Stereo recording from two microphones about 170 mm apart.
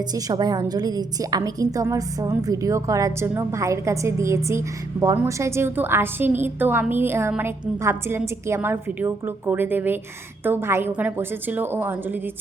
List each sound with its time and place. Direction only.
0.0 s a woman's voice: 20° right (ahead or behind)